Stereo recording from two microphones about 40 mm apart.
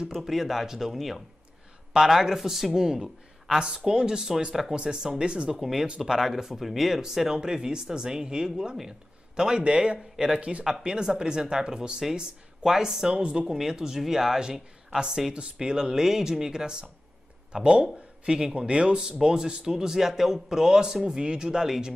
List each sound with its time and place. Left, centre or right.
0.1 s speech: centre
2.2 s speech: centre
5.6 s speech: centre
13.1 s speech: right
13.5 s speech: centre